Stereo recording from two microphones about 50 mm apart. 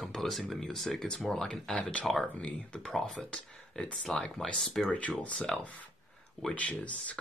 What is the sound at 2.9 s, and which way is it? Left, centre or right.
Speech, centre.